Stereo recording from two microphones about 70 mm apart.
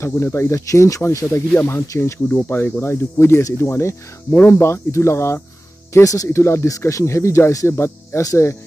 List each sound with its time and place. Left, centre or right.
0.0 s speech: left
2.2 s speech: left